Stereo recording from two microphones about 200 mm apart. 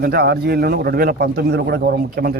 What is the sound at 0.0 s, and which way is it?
A man's voice, 55° right (ahead or behind).